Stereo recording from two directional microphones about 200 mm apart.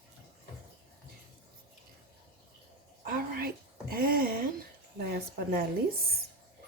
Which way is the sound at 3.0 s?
45° right (ahead or behind).